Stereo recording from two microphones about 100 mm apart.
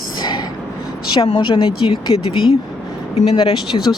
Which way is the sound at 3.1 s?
90° left.